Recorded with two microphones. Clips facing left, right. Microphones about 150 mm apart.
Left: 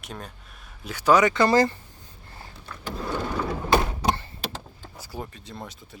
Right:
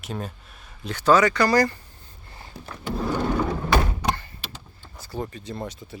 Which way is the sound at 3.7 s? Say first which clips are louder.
Left 4 dB; 25° left (ahead or behind).